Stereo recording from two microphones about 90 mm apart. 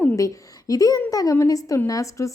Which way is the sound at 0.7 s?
45° left (ahead or behind).